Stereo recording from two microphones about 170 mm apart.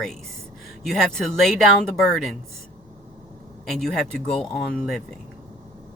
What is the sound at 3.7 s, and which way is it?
Speech, centre (ahead or behind).